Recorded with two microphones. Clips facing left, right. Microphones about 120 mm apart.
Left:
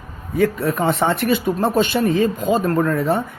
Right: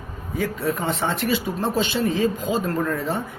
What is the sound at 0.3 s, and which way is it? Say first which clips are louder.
Speech: left 6 dB; 60° left (ahead or behind).